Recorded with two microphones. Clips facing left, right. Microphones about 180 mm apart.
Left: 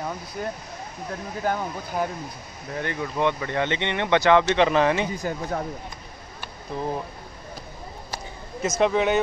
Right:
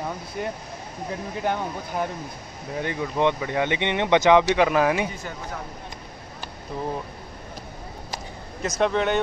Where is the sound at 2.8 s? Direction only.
15° right (ahead or behind).